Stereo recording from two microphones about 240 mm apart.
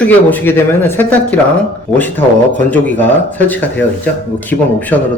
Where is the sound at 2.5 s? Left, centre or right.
Centre.